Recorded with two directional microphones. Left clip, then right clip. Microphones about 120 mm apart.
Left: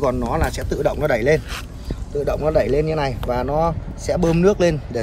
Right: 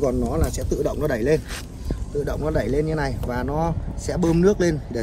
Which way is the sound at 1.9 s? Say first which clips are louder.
Left 4 dB; 15° left (ahead or behind).